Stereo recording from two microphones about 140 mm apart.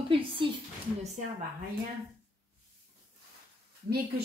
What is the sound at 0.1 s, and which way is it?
Speech, 40° right (ahead or behind).